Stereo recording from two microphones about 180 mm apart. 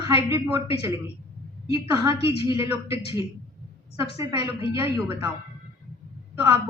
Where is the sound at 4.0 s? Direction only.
20° right (ahead or behind).